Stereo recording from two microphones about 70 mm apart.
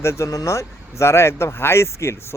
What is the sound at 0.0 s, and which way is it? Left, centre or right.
Speech, left.